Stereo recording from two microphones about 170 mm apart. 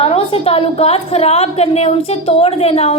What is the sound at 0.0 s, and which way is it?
A woman's voice, 35° left (ahead or behind).